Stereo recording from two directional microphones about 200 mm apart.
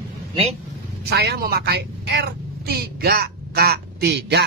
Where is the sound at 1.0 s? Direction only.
55° right (ahead or behind).